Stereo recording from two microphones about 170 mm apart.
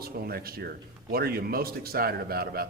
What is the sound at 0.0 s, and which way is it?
Speech, 65° right (ahead or behind).